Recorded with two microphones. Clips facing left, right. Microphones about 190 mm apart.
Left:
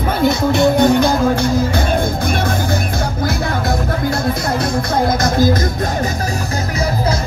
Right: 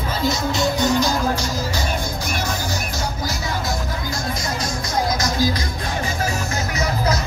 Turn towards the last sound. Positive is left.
turn(degrees=55)  # may be behind; listen again after turning